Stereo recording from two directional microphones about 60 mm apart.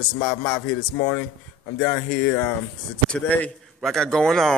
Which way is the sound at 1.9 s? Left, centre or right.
Centre.